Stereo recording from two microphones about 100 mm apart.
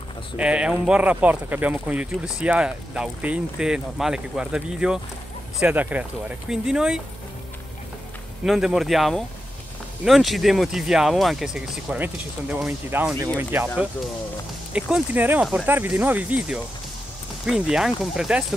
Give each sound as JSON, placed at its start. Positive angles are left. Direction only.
{"t": 0.4, "sound": "speech", "side_deg": -10}
{"t": 8.5, "sound": "speech", "side_deg": -5}
{"t": 13.4, "sound": "speech", "side_deg": -20}
{"t": 14.7, "sound": "speech", "side_deg": -10}